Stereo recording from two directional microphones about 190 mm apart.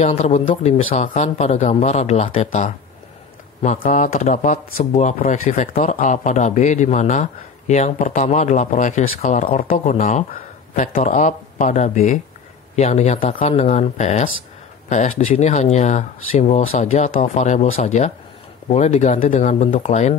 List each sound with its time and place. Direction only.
0.0 s speech: 40° left (ahead or behind)